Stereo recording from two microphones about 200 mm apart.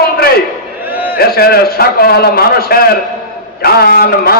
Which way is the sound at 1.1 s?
50° left (ahead or behind).